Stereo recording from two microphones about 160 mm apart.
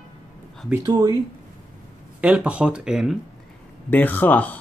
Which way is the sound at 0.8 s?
25° right (ahead or behind).